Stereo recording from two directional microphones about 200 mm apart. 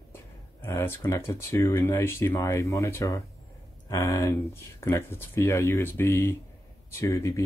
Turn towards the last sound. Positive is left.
turn(degrees=15)  # may be behind; listen again after turning